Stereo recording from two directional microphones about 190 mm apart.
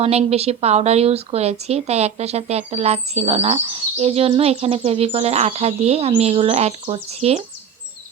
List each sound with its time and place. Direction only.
0.0 s a woman's voice: 30° right (ahead or behind)